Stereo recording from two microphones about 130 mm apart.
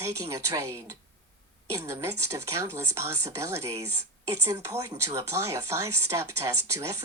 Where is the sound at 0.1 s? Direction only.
25° right (ahead or behind).